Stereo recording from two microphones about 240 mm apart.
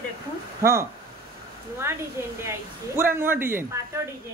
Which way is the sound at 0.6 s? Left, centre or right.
Centre.